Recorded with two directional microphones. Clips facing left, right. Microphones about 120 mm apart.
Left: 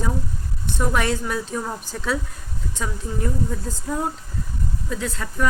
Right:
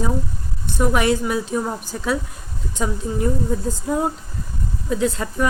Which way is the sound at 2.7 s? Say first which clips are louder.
Right 6 dB; 20° right (ahead or behind).